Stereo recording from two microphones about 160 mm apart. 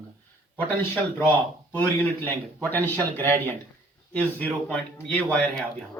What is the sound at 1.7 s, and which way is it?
A man's voice, 15° left (ahead or behind).